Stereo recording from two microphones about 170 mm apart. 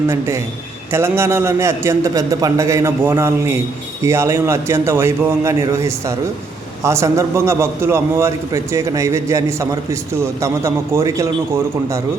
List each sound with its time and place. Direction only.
0.1 s a man's voice: 15° right (ahead or behind)